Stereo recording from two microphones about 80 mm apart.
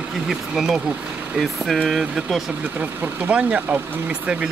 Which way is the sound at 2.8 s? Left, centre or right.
Centre.